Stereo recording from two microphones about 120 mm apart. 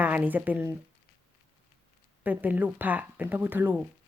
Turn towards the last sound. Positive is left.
turn(degrees=-15)  # may be behind; listen again after turning